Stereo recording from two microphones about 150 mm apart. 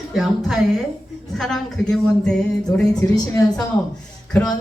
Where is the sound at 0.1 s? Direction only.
Centre (ahead or behind).